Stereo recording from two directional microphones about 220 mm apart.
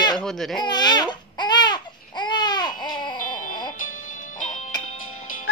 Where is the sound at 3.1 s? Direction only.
35° left (ahead or behind).